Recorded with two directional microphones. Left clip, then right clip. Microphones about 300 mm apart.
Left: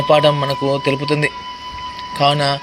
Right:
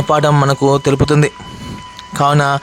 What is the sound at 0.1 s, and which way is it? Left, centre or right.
Speech, right.